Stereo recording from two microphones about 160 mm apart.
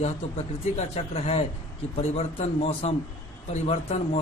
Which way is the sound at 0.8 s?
40° left (ahead or behind).